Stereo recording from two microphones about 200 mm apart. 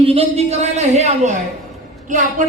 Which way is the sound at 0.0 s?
30° right (ahead or behind).